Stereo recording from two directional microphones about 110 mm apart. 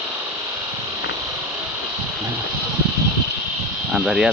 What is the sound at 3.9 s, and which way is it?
Speech, 5° right (ahead or behind).